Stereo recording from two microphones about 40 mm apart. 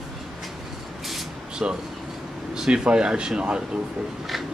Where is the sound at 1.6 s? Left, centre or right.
Right.